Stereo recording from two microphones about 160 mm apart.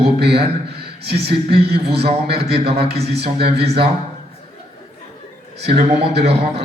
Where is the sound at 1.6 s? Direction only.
90° right.